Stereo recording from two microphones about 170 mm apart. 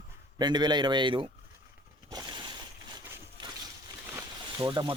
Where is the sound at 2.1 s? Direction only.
25° right (ahead or behind).